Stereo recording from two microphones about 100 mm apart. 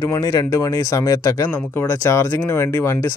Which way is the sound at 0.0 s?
40° left (ahead or behind).